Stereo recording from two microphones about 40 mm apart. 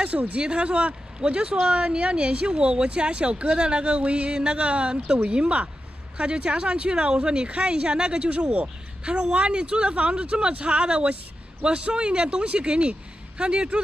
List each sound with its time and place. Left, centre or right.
0.0 s speech: right